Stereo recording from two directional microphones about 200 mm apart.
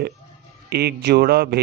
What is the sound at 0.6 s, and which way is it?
Speech, 55° right (ahead or behind).